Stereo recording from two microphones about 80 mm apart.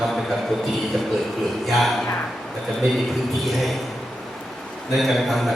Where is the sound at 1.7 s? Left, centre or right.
Centre.